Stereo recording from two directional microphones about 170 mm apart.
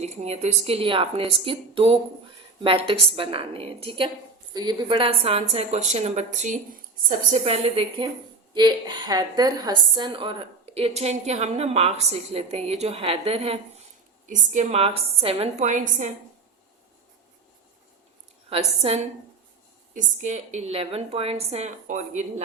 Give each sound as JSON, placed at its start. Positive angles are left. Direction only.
{"t": 0.0, "sound": "a woman's voice", "side_deg": -40}
{"t": 14.3, "sound": "a woman's voice", "side_deg": -45}
{"t": 18.4, "sound": "a woman's voice", "side_deg": -35}